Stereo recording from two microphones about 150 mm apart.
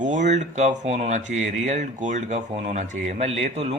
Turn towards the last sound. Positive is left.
turn(degrees=-45)  # may be behind; listen again after turning